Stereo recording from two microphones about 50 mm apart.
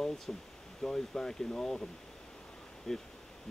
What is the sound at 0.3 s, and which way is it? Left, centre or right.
Speech, centre.